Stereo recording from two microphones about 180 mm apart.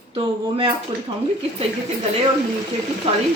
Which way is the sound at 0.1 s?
30° right (ahead or behind).